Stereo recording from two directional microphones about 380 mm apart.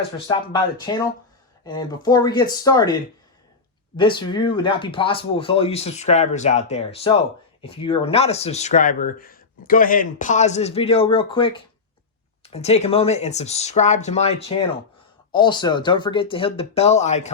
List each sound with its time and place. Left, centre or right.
0.3 s speech: centre
3.9 s speech: centre